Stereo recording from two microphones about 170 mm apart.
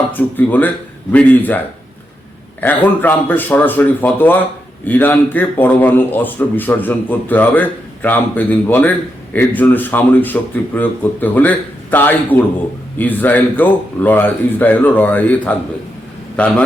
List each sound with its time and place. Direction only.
0.1 s speech: 10° left (ahead or behind)
2.6 s speech: 10° left (ahead or behind)